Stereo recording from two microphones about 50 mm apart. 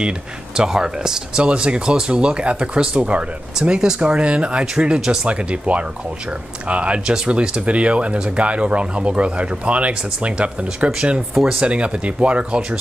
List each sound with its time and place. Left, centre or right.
0.6 s speech: centre
5.3 s speech: right